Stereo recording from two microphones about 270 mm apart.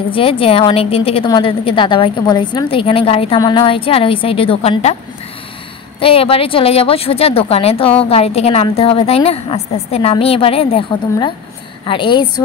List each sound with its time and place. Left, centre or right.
0.1 s a woman's voice: centre
5.9 s a woman's voice: left